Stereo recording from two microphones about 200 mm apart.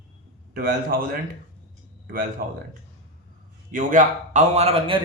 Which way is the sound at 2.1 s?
45° right (ahead or behind).